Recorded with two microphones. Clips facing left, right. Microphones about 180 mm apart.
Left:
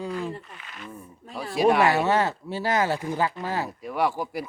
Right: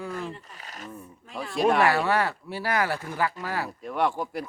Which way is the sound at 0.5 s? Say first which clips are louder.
Even; 40° right (ahead or behind).